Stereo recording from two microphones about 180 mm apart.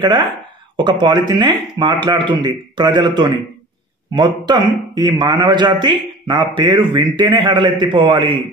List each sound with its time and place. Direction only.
0.0 s speech: 25° right (ahead or behind)